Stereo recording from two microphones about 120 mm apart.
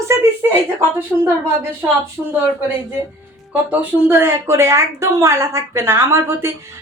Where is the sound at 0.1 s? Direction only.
25° right (ahead or behind).